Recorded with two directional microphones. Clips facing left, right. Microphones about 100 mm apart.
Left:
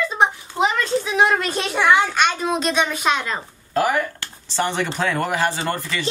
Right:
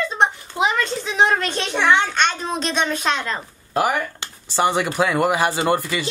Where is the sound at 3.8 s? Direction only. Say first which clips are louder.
Left 1 dB; 15° right (ahead or behind).